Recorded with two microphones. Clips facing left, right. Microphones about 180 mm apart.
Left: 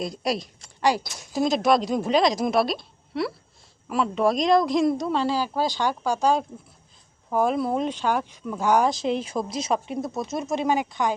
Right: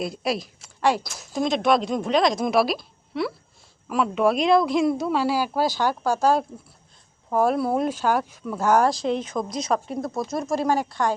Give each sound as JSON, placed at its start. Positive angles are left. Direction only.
{"t": 0.0, "sound": "speech", "side_deg": -5}
{"t": 9.0, "sound": "speech", "side_deg": 30}
{"t": 10.2, "sound": "speech", "side_deg": 0}